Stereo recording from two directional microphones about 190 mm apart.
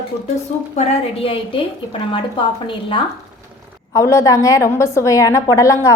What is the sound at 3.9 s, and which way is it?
A woman's voice, 15° left (ahead or behind).